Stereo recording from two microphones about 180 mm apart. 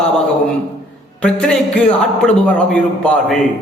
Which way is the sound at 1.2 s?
5° left (ahead or behind).